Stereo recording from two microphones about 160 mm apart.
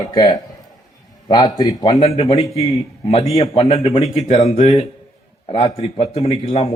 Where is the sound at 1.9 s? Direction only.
40° left (ahead or behind).